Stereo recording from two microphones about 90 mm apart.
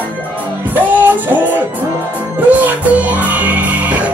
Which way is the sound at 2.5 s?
15° right (ahead or behind).